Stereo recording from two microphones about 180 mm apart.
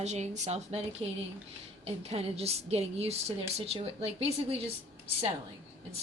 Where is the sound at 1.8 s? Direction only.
35° right (ahead or behind).